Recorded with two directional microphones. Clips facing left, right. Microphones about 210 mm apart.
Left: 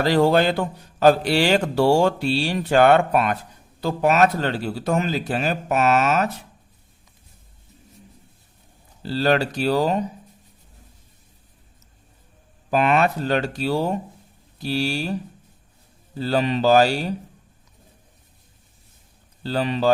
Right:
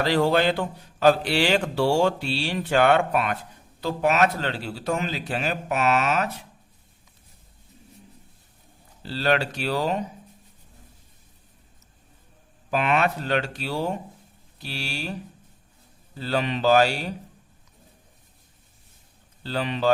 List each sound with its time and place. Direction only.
0.0 s a man's voice: 40° left (ahead or behind)
9.0 s speech: 40° left (ahead or behind)
12.7 s speech: 40° left (ahead or behind)
16.1 s speech: 40° left (ahead or behind)
19.4 s speech: 40° left (ahead or behind)